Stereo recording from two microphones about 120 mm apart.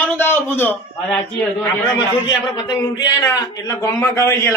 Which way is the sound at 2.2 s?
35° left (ahead or behind).